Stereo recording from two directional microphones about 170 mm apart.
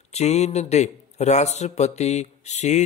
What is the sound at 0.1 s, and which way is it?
Speech, 40° left (ahead or behind).